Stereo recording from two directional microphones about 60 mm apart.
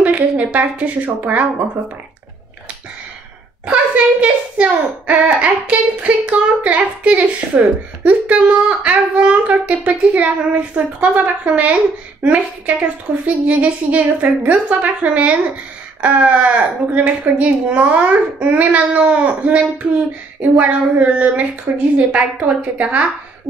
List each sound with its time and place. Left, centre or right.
0.0 s a woman's voice: right
3.6 s a woman's voice: right
13.1 s a woman's voice: centre